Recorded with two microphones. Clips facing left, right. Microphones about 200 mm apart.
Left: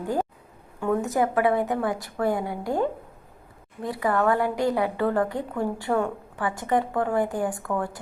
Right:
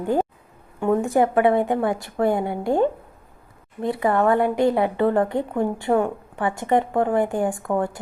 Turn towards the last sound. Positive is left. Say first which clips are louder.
# right 5 dB
turn(degrees=-25)  # may be behind; listen again after turning